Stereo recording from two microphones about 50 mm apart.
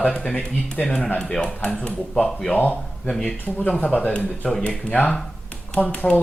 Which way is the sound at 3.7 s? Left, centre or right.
Left.